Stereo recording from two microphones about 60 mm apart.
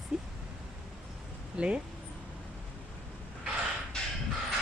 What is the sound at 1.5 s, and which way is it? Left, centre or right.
Speech, centre.